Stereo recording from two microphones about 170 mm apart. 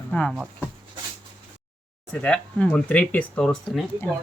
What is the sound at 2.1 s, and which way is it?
Speech, 5° left (ahead or behind).